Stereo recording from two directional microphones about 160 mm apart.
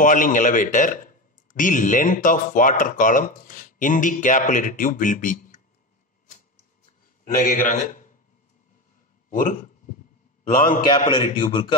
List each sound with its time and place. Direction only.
0.0 s a man's voice: 55° left (ahead or behind)
7.2 s a man's voice: 55° left (ahead or behind)
9.3 s a man's voice: 55° left (ahead or behind)
11.1 s speech: 30° left (ahead or behind)